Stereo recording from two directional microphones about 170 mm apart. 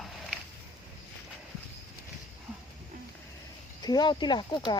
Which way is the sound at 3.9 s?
25° left (ahead or behind).